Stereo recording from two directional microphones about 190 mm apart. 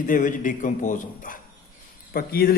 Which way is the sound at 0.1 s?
45° left (ahead or behind).